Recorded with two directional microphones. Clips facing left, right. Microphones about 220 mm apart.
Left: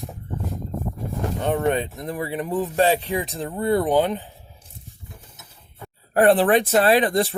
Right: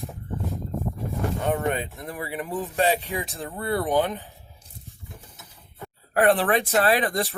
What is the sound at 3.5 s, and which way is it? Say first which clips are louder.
Speech: left 4 dB; 15° left (ahead or behind).